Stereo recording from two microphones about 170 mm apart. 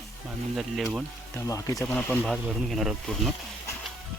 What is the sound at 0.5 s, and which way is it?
Speech, centre (ahead or behind).